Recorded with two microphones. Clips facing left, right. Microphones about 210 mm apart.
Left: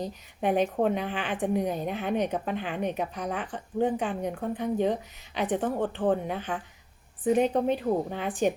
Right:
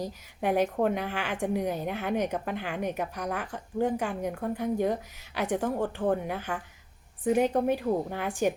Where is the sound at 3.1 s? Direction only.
65° right (ahead or behind).